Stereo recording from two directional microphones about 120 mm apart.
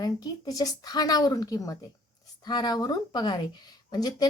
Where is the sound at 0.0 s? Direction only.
30° left (ahead or behind).